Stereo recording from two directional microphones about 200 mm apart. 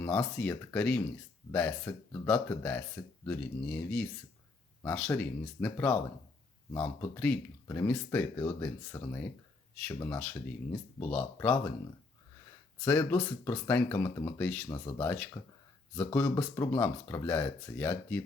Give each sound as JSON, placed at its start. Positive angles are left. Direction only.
{"t": 0.0, "sound": "speech", "side_deg": 5}
{"t": 12.8, "sound": "speech", "side_deg": 10}